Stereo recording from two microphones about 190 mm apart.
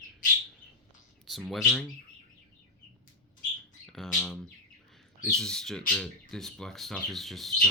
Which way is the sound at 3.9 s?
Centre (ahead or behind).